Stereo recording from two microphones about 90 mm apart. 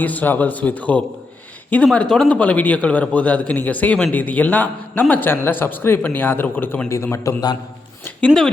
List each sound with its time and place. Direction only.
0.0 s a man's voice: 20° left (ahead or behind)